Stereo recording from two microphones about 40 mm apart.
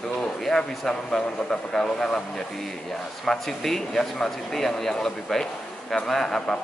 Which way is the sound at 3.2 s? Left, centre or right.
Centre.